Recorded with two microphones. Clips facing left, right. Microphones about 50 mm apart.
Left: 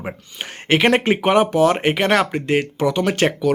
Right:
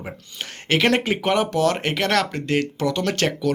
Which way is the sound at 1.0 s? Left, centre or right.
Left.